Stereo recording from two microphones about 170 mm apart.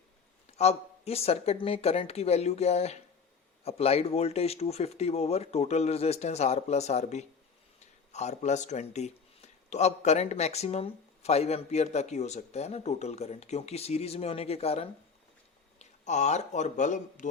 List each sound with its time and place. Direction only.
0.5 s speech: 40° left (ahead or behind)